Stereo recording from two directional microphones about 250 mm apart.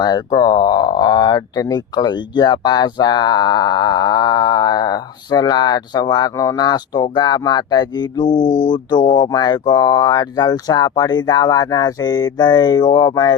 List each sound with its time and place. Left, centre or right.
0.0 s speech: centre
8.4 s speech: left
8.7 s speech: centre